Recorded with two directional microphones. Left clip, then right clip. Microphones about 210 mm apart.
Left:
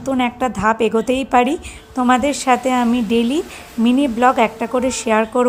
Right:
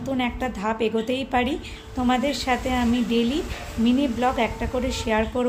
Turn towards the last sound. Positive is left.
turn(degrees=30)  # may be behind; listen again after turning